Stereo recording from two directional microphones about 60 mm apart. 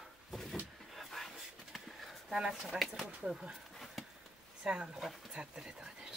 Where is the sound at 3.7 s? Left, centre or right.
Centre.